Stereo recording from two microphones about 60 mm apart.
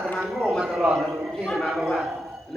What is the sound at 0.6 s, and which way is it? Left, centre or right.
Speech, centre.